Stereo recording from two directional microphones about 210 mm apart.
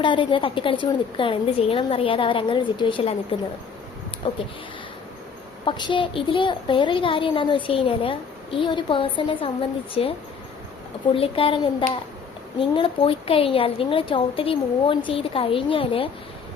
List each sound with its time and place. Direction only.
0.0 s a child's voice: 25° left (ahead or behind)
4.2 s a child's voice: 25° left (ahead or behind)
5.6 s a child's voice: 20° left (ahead or behind)